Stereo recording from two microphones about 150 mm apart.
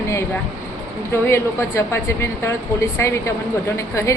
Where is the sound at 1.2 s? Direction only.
15° left (ahead or behind).